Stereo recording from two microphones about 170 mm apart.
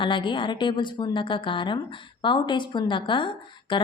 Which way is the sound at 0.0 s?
30° left (ahead or behind).